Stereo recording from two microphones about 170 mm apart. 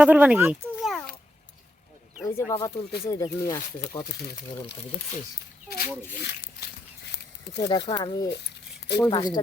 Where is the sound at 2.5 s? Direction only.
20° left (ahead or behind).